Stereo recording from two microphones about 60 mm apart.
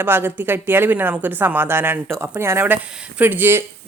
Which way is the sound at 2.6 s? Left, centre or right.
Right.